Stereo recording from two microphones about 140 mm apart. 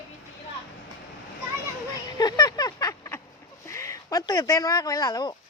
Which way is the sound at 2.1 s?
30° left (ahead or behind).